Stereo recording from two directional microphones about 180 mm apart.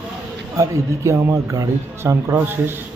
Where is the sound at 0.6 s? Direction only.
15° right (ahead or behind).